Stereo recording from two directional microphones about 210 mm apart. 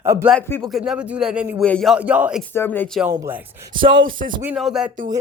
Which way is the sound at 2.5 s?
10° left (ahead or behind).